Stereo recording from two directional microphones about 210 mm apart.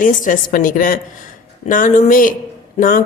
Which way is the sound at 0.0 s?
40° left (ahead or behind).